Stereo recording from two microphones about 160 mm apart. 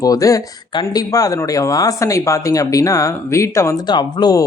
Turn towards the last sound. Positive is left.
turn(degrees=25)  # may be behind; listen again after turning